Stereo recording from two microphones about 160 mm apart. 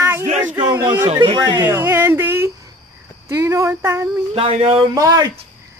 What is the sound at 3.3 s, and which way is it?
Speech, 20° right (ahead or behind).